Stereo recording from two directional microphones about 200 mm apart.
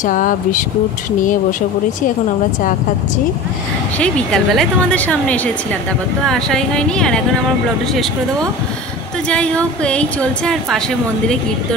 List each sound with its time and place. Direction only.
0.0 s speech: 40° left (ahead or behind)
4.0 s a woman's voice: 5° left (ahead or behind)
9.3 s a woman's voice: 5° left (ahead or behind)